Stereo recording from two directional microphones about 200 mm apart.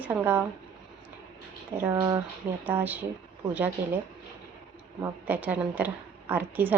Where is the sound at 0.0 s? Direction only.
10° right (ahead or behind).